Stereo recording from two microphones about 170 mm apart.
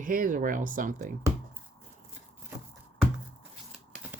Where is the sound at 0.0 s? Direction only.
55° right (ahead or behind).